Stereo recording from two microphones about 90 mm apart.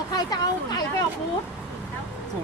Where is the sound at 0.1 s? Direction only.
50° left (ahead or behind).